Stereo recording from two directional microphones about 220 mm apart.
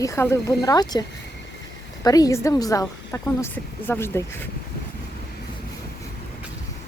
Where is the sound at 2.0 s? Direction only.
15° left (ahead or behind).